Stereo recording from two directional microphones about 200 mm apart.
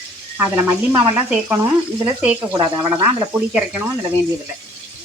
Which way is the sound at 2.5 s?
20° right (ahead or behind).